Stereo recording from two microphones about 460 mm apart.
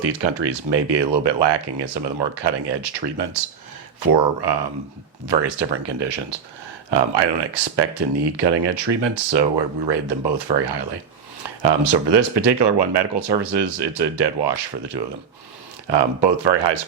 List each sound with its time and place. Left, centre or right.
0.0 s speech: right